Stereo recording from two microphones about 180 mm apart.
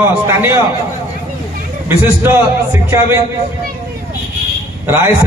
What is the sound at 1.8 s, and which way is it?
A man's voice, 10° right (ahead or behind).